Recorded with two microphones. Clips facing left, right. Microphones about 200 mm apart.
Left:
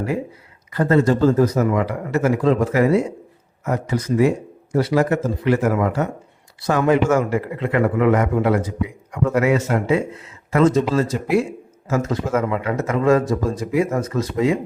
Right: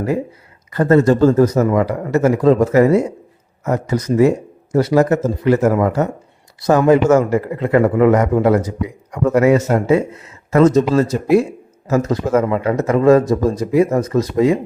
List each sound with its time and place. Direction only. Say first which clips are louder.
0.7 s a man's voice: right 4 dB; 45° right (ahead or behind)